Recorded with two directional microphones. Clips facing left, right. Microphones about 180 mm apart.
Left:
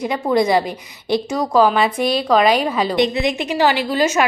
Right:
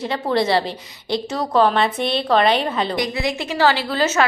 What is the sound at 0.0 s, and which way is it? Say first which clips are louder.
Speech: left 3 dB; 15° left (ahead or behind).